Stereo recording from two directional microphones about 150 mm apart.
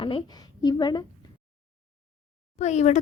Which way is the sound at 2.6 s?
50° left (ahead or behind).